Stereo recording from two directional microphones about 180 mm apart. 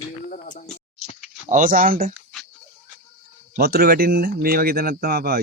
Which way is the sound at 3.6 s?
60° right (ahead or behind).